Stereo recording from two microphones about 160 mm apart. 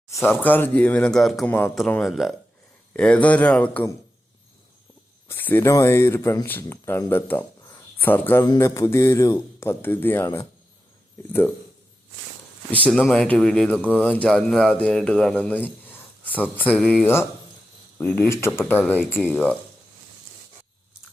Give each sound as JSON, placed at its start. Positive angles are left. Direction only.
{"t": 0.1, "sound": "a man's voice", "side_deg": 15}
{"t": 1.5, "sound": "a man's voice", "side_deg": 15}
{"t": 1.9, "sound": "a man's voice", "side_deg": 0}
{"t": 5.3, "sound": "a man's voice", "side_deg": 10}
{"t": 12.9, "sound": "a man's voice", "side_deg": 5}